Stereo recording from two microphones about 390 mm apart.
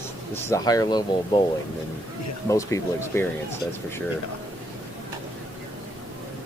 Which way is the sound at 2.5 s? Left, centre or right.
Centre.